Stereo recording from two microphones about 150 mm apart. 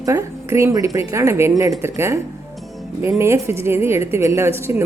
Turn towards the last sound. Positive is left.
turn(degrees=-15)  # may be behind; listen again after turning